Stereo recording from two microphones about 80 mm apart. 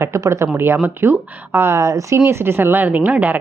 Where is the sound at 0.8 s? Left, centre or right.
Right.